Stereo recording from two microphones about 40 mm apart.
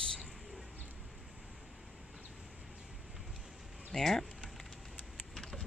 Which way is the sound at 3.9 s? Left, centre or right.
Centre.